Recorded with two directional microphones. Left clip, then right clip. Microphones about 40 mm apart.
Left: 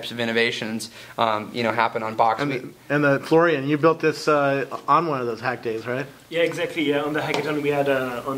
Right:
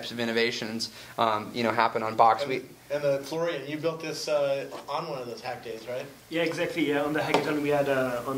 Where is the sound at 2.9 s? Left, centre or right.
Left.